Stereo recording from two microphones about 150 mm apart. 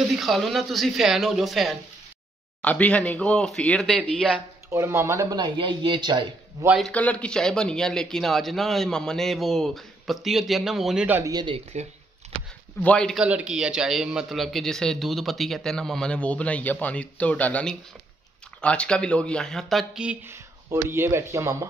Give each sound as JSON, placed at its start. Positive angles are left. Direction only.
{"t": 0.1, "sound": "a man's voice", "side_deg": 0}
{"t": 2.6, "sound": "speech", "side_deg": 10}
{"t": 4.6, "sound": "speech", "side_deg": -20}
{"t": 5.4, "sound": "speech", "side_deg": -30}
{"t": 6.8, "sound": "a man's voice", "side_deg": 10}
{"t": 11.3, "sound": "speech", "side_deg": -35}
{"t": 12.8, "sound": "a man's voice", "side_deg": 5}
{"t": 13.2, "sound": "a man's voice", "side_deg": -5}
{"t": 20.7, "sound": "speech", "side_deg": -15}